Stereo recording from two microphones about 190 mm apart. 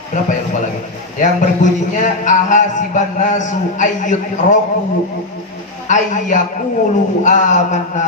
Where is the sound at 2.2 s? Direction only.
40° left (ahead or behind).